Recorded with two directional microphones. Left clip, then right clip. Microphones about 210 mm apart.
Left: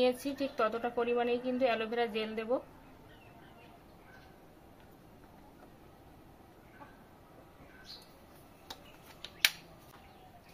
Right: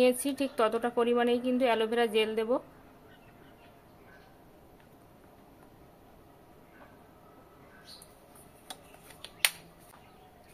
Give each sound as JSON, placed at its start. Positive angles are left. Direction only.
{"t": 0.0, "sound": "a woman's voice", "side_deg": -45}